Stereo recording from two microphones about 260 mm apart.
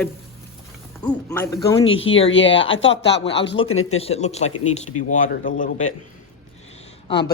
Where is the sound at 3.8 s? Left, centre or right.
Left.